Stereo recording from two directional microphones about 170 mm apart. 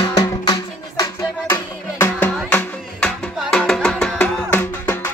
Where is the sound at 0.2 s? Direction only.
20° left (ahead or behind).